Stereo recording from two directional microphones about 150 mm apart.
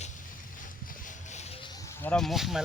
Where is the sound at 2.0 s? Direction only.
5° left (ahead or behind).